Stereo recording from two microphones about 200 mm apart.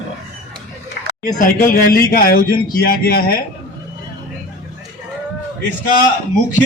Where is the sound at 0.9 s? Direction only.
45° left (ahead or behind).